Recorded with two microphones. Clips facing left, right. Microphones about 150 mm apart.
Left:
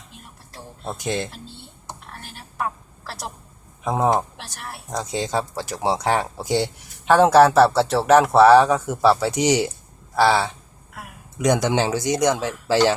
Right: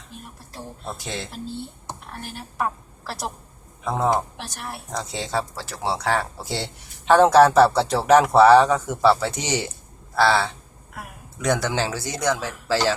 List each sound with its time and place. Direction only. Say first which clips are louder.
3.8 s speech: left 2 dB; 20° left (ahead or behind)